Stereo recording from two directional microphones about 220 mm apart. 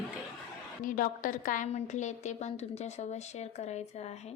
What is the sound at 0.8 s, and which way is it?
A woman's voice, 40° left (ahead or behind).